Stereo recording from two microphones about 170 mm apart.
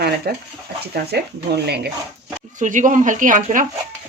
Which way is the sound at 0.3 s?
65° right (ahead or behind).